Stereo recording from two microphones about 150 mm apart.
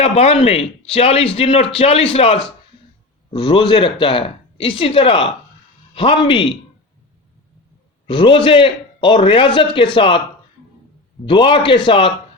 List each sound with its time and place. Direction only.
0.0 s a man's voice: 40° left (ahead or behind)
8.0 s a man's voice: 35° left (ahead or behind)
11.3 s a man's voice: 35° left (ahead or behind)